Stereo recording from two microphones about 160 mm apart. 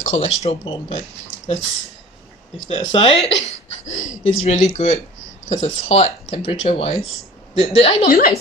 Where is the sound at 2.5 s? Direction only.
50° left (ahead or behind).